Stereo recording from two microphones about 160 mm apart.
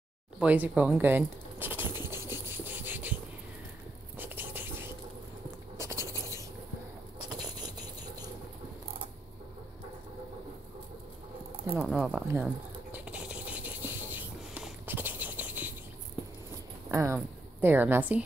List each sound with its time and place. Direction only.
0.4 s pigeon: 10° right (ahead or behind)
4.2 s a sound: 10° right (ahead or behind)
11.8 s speech: 5° right (ahead or behind)
12.9 s scratch: 5° right (ahead or behind)
16.9 s a woman's voice: 15° right (ahead or behind)